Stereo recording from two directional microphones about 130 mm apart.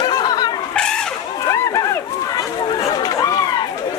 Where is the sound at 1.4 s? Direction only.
25° left (ahead or behind).